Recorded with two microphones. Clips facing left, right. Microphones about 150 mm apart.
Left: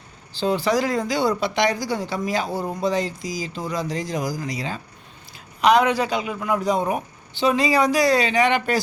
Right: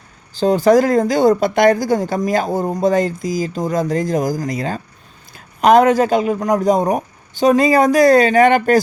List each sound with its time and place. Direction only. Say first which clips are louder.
0.3 s speech: right 9 dB; 45° right (ahead or behind)